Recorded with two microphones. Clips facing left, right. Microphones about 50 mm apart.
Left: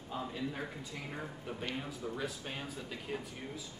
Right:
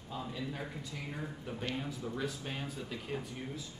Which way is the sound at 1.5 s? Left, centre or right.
Centre.